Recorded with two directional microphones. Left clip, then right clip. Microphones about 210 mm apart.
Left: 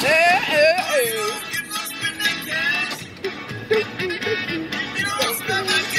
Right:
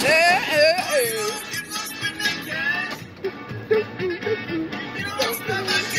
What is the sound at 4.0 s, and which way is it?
Music, 50° left (ahead or behind).